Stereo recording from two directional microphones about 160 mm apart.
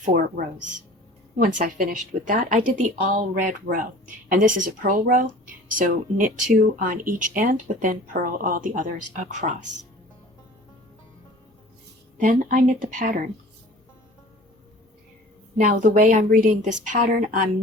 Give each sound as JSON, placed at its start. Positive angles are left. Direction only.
{"t": 0.0, "sound": "a woman's voice", "side_deg": -60}
{"t": 1.5, "sound": "a woman's voice", "side_deg": -60}
{"t": 12.1, "sound": "a woman's voice", "side_deg": -55}
{"t": 15.5, "sound": "a woman's voice", "side_deg": -50}